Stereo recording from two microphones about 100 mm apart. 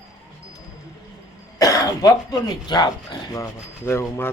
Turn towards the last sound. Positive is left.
turn(degrees=25)  # may be behind; listen again after turning